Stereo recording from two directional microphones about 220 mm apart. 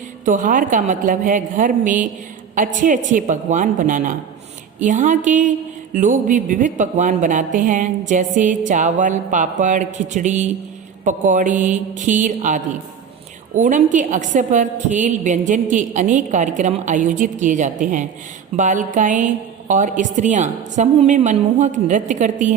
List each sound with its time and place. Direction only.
0.3 s speech: 35° right (ahead or behind)